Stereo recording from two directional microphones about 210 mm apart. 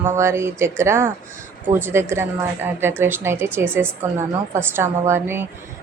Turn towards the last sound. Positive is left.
turn(degrees=-10)  # may be behind; listen again after turning